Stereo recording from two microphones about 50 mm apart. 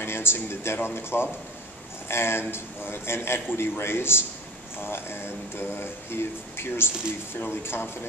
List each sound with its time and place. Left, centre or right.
0.0 s a man's voice: left